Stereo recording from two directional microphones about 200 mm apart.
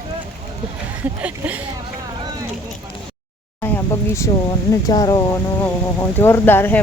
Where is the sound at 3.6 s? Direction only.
15° left (ahead or behind).